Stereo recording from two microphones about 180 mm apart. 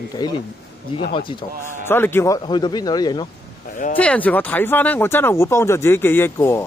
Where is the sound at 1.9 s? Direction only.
10° left (ahead or behind).